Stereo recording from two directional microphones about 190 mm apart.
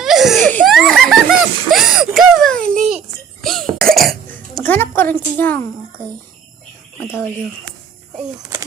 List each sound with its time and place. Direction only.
0.0 s laughter: centre (ahead or behind)
2.6 s a sound: 45° right (ahead or behind)
3.4 s cough: centre (ahead or behind)
7.0 s speech: 15° left (ahead or behind)